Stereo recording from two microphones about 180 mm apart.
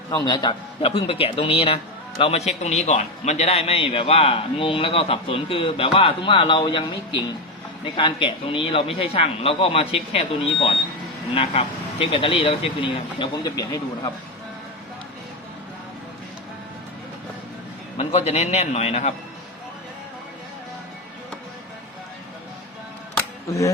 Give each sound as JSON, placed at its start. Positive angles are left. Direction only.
{"t": 0.1, "sound": "a man's voice", "side_deg": 20}
{"t": 17.9, "sound": "a man's voice", "side_deg": 30}
{"t": 23.5, "sound": "speech", "side_deg": 15}